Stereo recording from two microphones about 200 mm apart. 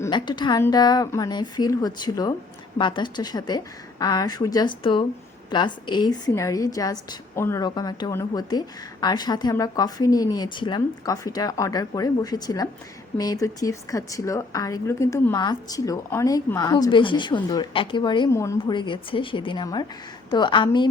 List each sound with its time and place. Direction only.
0.0 s a woman's voice: 20° left (ahead or behind)